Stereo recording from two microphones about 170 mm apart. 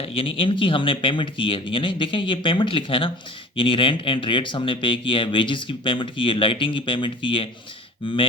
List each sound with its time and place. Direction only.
0.0 s speech: 35° left (ahead or behind)